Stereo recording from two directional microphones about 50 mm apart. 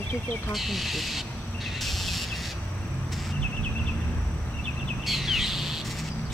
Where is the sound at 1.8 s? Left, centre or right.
Centre.